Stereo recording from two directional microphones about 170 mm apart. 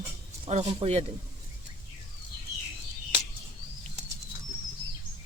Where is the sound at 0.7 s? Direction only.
35° right (ahead or behind).